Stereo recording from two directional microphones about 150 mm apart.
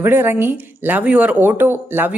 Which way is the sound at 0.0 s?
15° right (ahead or behind).